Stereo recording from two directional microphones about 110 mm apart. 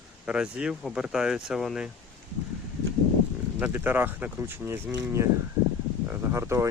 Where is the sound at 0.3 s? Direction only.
10° right (ahead or behind).